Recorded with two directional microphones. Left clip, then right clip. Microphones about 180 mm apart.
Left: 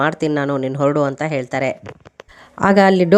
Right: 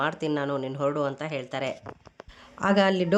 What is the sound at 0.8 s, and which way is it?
Speech, 40° left (ahead or behind).